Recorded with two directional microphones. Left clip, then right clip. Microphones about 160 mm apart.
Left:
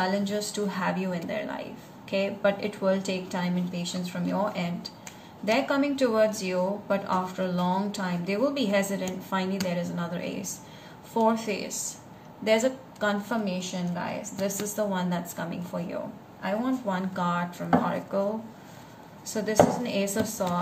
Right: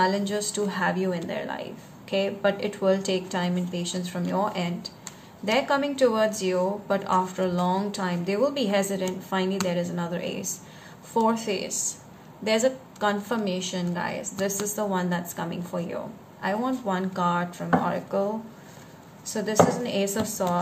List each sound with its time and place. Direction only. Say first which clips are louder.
0.0 s a woman's voice: right 4 dB; 35° right (ahead or behind)
19.2 s a woman's voice: right 1 dB; 30° right (ahead or behind)